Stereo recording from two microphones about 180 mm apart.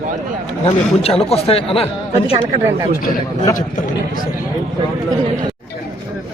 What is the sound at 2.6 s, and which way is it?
Speech, 20° right (ahead or behind).